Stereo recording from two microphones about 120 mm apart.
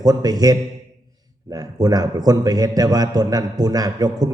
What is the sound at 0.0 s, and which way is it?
A man's voice, 35° right (ahead or behind).